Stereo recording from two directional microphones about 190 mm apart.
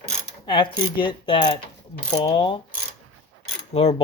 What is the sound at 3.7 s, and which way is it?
Speech, 30° left (ahead or behind).